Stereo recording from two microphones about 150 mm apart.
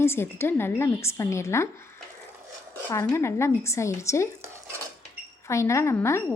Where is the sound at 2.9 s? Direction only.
20° left (ahead or behind).